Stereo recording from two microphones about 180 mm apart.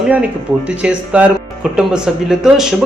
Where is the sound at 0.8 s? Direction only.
5° right (ahead or behind).